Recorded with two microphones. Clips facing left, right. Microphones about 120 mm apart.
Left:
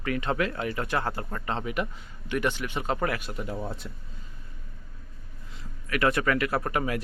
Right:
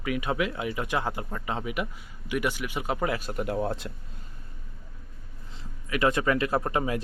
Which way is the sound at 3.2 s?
40° right (ahead or behind).